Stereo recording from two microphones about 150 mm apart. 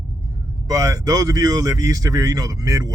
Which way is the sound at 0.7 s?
25° right (ahead or behind).